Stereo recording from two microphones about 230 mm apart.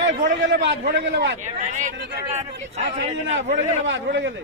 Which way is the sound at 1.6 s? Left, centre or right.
Right.